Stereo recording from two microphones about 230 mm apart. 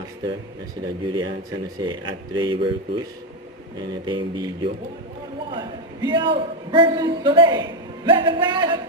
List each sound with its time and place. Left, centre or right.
1.1 s a man's voice: centre